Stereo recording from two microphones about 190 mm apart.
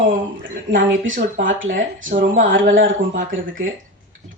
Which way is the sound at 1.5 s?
90° right.